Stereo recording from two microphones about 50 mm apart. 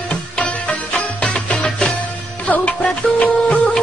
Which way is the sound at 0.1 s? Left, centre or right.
Left.